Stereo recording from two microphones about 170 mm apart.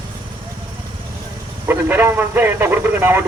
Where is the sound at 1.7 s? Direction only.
10° right (ahead or behind).